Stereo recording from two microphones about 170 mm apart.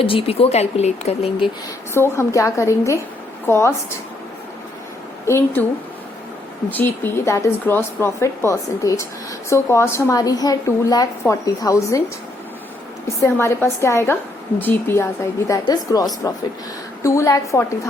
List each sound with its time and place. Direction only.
0.0 s a woman's voice: 30° left (ahead or behind)
1.9 s speech: 15° left (ahead or behind)
5.2 s speech: 15° left (ahead or behind)
6.7 s a woman's voice: 10° left (ahead or behind)
13.1 s a woman's voice: 15° left (ahead or behind)